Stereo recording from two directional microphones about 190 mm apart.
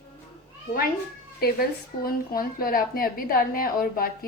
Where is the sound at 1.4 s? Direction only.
50° left (ahead or behind).